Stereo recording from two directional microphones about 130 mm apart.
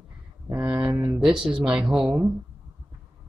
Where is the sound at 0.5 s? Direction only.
15° right (ahead or behind).